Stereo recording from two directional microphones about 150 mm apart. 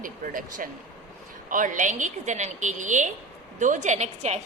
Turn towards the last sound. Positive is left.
turn(degrees=-50)  # may be behind; listen again after turning